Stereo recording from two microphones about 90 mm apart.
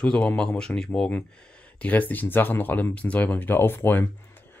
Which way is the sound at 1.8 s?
20° left (ahead or behind).